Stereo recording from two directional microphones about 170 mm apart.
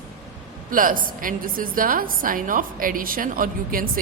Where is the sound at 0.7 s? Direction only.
55° right (ahead or behind).